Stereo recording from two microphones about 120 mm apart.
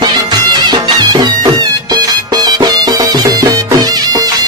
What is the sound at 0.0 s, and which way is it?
Music, 35° right (ahead or behind).